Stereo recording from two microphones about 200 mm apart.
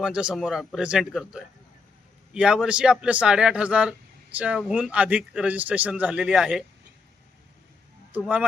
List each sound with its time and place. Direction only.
0.0 s a man's voice: 5° right (ahead or behind)
8.1 s a man's voice: 5° right (ahead or behind)